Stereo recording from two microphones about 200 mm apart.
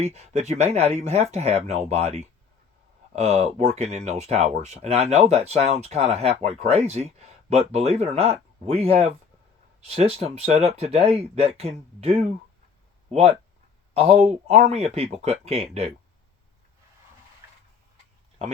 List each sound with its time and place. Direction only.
0.0 s speech: 35° right (ahead or behind)